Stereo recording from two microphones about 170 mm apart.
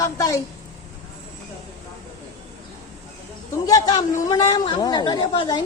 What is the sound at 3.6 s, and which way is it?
Speech, 20° left (ahead or behind).